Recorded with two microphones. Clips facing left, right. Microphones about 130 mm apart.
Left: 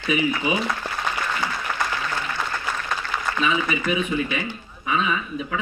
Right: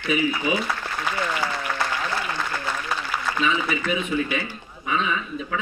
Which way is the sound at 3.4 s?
15° left (ahead or behind).